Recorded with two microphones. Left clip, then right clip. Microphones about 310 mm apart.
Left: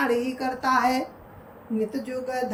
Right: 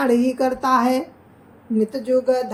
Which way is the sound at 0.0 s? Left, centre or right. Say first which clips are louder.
Right 6 dB; centre.